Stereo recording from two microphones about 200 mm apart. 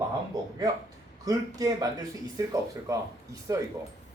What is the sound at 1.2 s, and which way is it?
Speech, 15° right (ahead or behind).